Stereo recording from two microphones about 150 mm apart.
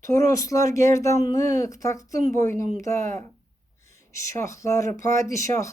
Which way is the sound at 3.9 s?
20° left (ahead or behind).